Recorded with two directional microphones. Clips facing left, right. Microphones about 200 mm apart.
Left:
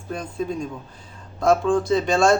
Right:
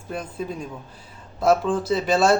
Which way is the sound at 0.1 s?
5° right (ahead or behind).